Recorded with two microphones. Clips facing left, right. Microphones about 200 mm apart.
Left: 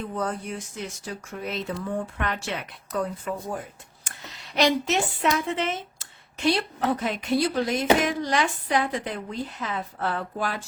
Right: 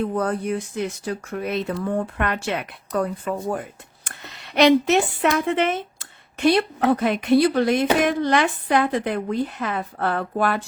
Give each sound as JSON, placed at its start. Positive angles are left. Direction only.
{"t": 0.1, "sound": "a woman's voice", "side_deg": -60}